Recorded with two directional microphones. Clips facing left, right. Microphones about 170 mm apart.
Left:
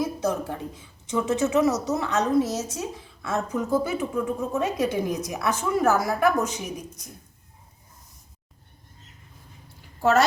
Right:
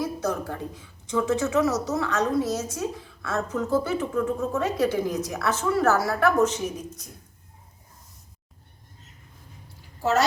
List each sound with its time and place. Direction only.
0.0 s a woman's voice: 20° left (ahead or behind)
10.0 s speech: 55° left (ahead or behind)